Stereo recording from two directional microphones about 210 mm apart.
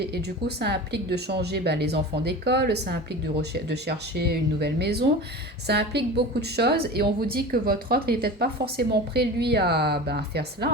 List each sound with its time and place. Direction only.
0.0 s speech: 50° right (ahead or behind)